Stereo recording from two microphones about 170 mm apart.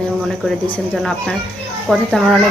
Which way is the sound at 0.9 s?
5° left (ahead or behind).